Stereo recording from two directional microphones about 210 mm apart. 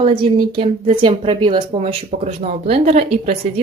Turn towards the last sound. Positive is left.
turn(degrees=-30)  # may be behind; listen again after turning